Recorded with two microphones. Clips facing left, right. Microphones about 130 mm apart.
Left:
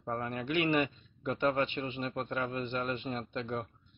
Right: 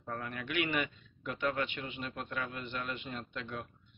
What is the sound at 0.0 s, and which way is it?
A man's voice, 25° left (ahead or behind).